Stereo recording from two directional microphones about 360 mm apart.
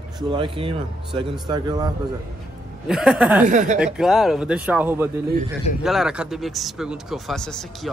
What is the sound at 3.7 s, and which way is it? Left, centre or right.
Speech, centre.